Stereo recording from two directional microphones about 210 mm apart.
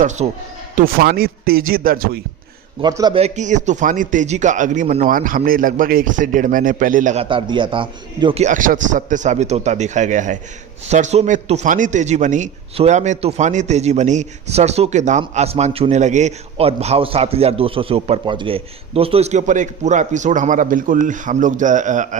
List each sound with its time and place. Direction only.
0.0 s a man's voice: 35° right (ahead or behind)
0.8 s speech: 45° right (ahead or behind)
2.8 s a man's voice: 20° right (ahead or behind); by 22.2 s 35° right (ahead or behind)